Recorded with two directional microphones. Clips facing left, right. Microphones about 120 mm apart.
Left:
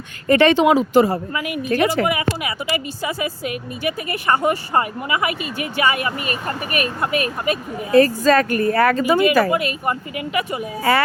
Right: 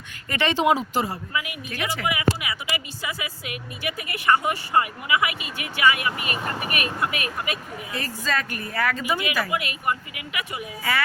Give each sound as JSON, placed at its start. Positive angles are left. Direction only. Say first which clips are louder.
{"t": 0.4, "sound": "speech", "louder": "left 4 dB", "side_deg": 75}
{"t": 1.3, "sound": "speech", "louder": "left 9 dB", "side_deg": 45}